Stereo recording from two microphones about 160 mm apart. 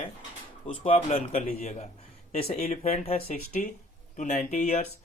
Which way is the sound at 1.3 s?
60° left (ahead or behind).